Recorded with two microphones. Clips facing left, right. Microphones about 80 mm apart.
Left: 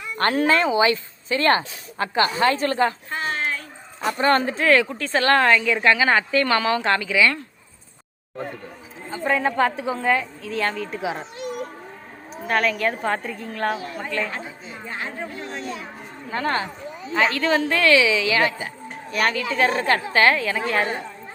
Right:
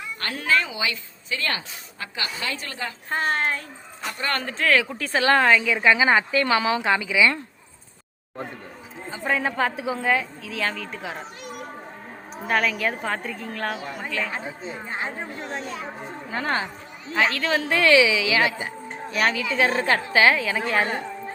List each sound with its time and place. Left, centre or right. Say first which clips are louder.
0.2 s a woman's voice: left 6 dB; left
3.1 s speech: right 2 dB; right
4.2 s speech: left 9 dB; left
4.4 s speech: left 3 dB; centre
4.7 s a woman's voice: left 3 dB; centre
9.0 s a woman's voice: left 3 dB; centre
12.5 s a woman's voice: left 2 dB; centre
14.3 s speech: right 1 dB; centre
16.3 s a woman's voice: left 2 dB; centre
17.7 s a woman's voice: right 3 dB; centre